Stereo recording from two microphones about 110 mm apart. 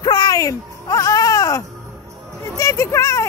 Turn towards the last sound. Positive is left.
turn(degrees=30)  # may be behind; listen again after turning